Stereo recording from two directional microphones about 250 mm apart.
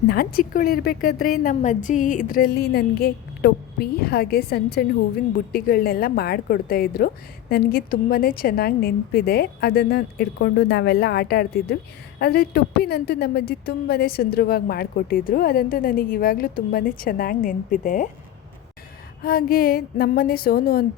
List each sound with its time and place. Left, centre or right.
0.1 s a woman's voice: left
19.2 s a woman's voice: left